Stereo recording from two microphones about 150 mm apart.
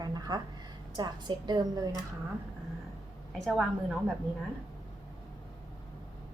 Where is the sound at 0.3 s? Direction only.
25° right (ahead or behind).